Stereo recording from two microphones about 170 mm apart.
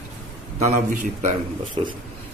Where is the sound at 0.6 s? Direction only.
45° right (ahead or behind).